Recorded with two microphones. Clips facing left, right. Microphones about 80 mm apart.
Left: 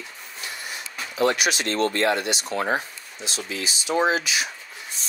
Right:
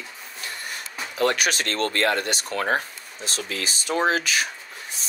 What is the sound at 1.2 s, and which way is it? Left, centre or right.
Speech, right.